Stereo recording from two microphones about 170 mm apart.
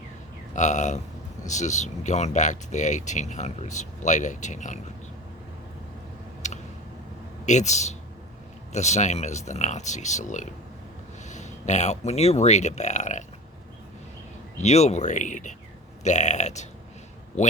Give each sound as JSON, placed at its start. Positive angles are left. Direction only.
{"t": 0.5, "sound": "speech", "side_deg": 45}
{"t": 6.4, "sound": "a sound", "side_deg": 45}
{"t": 7.4, "sound": "speech", "side_deg": 45}
{"t": 14.6, "sound": "a man's voice", "side_deg": 40}